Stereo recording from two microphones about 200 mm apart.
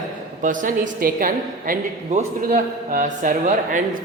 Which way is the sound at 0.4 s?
45° right (ahead or behind).